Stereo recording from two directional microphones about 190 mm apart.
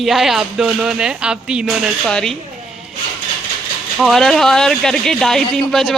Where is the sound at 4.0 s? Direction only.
Centre (ahead or behind).